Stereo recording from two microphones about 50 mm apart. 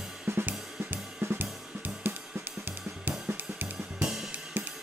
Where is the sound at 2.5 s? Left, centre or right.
Right.